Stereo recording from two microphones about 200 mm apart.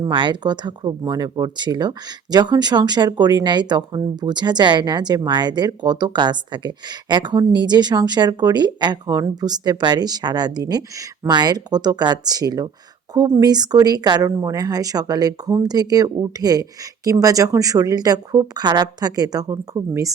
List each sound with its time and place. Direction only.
0.0 s speech: 25° right (ahead or behind)